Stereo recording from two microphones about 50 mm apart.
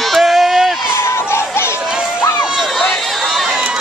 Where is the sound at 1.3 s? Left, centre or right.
Left.